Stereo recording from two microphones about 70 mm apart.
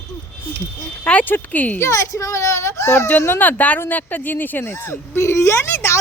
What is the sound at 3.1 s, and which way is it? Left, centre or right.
Speech, left.